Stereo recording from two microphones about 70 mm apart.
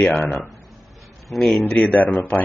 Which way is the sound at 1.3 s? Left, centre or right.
Centre.